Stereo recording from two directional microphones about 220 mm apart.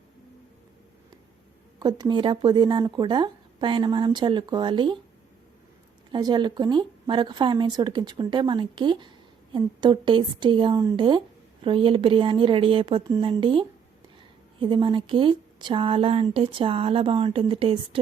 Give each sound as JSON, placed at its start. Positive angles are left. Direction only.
{"t": 1.8, "sound": "speech", "side_deg": -20}
{"t": 6.1, "sound": "speech", "side_deg": -20}